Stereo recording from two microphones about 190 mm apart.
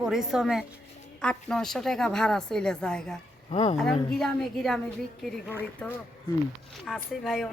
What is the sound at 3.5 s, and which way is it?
Speech, 30° left (ahead or behind).